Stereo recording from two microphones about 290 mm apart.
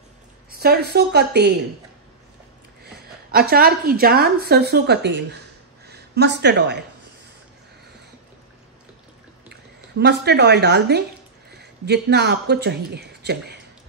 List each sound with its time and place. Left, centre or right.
0.5 s a woman's voice: right
2.8 s a woman's voice: right
9.9 s speech: right